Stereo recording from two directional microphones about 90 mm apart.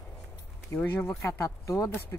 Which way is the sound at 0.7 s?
25° left (ahead or behind).